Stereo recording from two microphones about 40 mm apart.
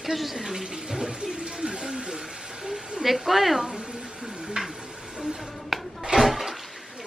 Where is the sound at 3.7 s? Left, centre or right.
Centre.